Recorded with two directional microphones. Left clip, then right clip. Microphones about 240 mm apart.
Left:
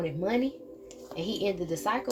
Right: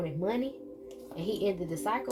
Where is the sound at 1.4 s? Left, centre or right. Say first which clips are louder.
Left 3 dB; left.